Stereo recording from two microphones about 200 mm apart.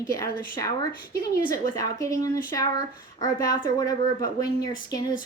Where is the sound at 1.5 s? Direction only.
15° left (ahead or behind).